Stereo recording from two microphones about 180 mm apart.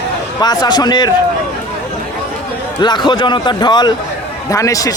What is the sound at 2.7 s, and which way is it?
A man's voice, 25° left (ahead or behind).